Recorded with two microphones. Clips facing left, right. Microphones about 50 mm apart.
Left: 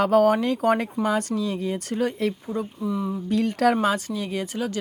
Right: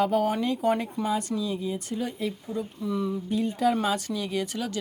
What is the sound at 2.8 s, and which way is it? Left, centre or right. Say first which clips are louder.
Speech: left 1 dB; centre.